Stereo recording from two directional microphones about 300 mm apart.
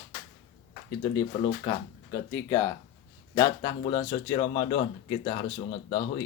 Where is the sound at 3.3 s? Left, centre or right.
Centre.